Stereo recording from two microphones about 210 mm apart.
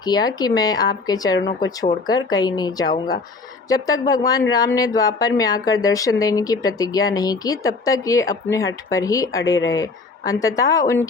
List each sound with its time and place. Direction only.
0.0 s speech: 20° left (ahead or behind)